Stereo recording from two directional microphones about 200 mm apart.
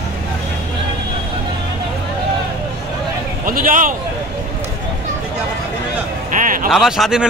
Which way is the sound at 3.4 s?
45° right (ahead or behind).